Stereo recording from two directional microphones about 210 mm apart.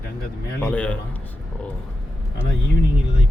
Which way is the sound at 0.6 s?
5° left (ahead or behind).